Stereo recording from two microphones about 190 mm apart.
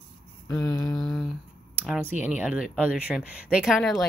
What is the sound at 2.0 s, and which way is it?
A woman's voice, 10° right (ahead or behind).